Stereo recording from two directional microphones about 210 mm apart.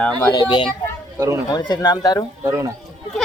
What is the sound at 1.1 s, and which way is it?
Speech, 15° right (ahead or behind).